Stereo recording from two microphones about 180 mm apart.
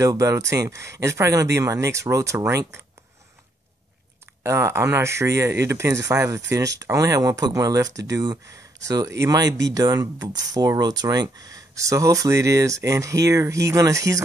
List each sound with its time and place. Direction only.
0.0 s speech: 15° right (ahead or behind)
4.4 s speech: 15° right (ahead or behind)